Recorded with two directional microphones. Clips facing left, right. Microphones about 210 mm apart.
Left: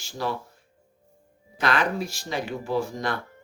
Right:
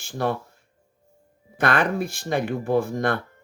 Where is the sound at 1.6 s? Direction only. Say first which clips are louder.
Right 3 dB; 55° right (ahead or behind).